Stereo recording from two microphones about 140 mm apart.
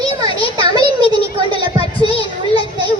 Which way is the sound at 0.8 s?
30° right (ahead or behind).